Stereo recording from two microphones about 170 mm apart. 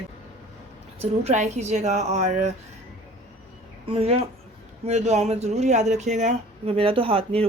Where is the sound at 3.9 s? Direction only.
35° right (ahead or behind).